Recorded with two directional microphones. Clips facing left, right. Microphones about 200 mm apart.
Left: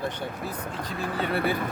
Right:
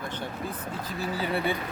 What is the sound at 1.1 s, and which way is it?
Speech, 60° left (ahead or behind).